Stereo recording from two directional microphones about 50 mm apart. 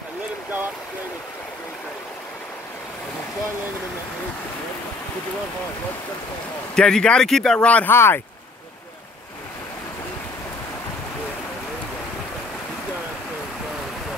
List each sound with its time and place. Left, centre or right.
6.7 s speech: centre
7.6 s speech: left
7.9 s speech: left